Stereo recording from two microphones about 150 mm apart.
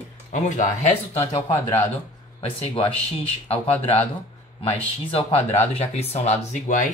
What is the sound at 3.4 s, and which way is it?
Speech, 40° left (ahead or behind).